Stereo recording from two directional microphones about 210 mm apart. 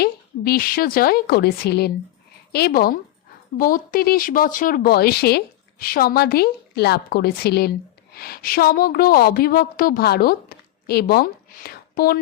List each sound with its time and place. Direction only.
0.0 s a woman's voice: 45° left (ahead or behind)